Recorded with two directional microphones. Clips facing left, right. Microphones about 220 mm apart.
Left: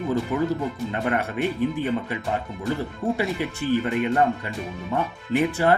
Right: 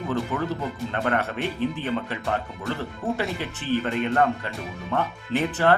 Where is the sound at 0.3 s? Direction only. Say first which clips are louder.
Left 6 dB; 10° left (ahead or behind).